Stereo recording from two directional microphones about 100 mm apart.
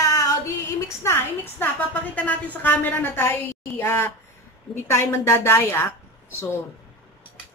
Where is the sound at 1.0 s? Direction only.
25° left (ahead or behind).